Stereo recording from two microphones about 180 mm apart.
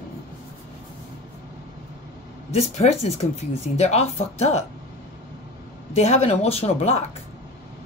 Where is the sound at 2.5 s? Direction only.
35° left (ahead or behind).